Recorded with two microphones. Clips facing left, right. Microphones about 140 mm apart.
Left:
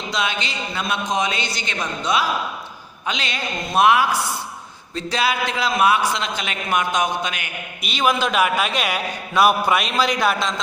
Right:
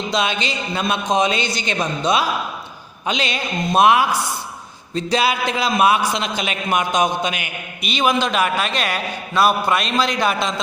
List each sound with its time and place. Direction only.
0.1 s a man's voice: 25° right (ahead or behind)
7.8 s a man's voice: centre (ahead or behind)